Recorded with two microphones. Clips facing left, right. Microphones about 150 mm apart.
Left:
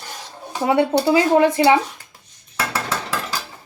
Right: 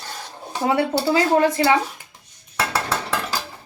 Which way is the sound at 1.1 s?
20° left (ahead or behind).